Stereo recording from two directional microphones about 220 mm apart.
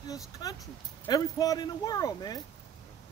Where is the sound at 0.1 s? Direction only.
15° left (ahead or behind).